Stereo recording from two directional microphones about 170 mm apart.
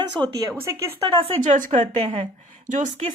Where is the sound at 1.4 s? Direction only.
45° right (ahead or behind).